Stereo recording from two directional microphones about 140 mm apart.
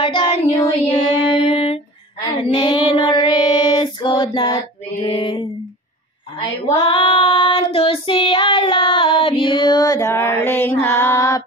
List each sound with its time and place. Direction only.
0.0 s child singing: 40° left (ahead or behind)
0.8 s music: 45° left (ahead or behind)
2.5 s child singing: 35° left (ahead or behind)
5.0 s a sound: 40° left (ahead or behind)
6.7 s child singing: 40° left (ahead or behind); by 11.4 s 20° left (ahead or behind)